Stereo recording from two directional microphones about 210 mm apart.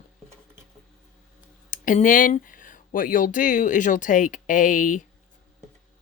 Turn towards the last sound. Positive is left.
turn(degrees=40)  # may be behind; listen again after turning